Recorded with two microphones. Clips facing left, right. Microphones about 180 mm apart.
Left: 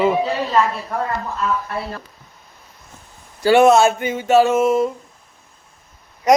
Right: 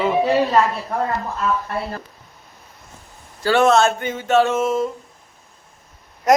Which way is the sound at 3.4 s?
15° left (ahead or behind).